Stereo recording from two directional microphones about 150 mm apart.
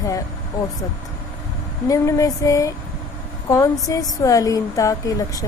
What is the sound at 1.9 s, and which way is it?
Speech, 20° left (ahead or behind).